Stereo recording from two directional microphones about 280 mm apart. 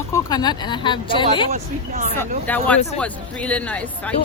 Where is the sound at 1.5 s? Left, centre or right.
Right.